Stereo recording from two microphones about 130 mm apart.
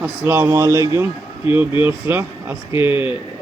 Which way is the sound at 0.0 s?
15° right (ahead or behind).